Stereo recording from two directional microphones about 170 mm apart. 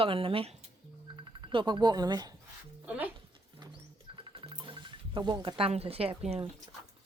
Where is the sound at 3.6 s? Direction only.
25° right (ahead or behind).